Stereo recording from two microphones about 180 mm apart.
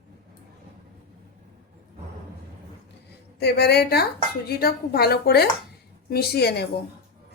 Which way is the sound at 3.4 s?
65° left (ahead or behind).